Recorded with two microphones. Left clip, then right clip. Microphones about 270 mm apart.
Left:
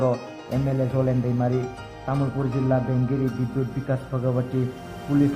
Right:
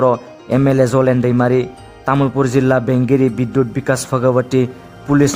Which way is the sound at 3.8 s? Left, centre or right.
Right.